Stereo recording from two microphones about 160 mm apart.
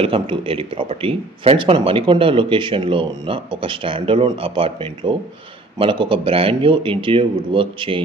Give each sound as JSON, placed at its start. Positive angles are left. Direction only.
{"t": 0.0, "sound": "speech", "side_deg": -35}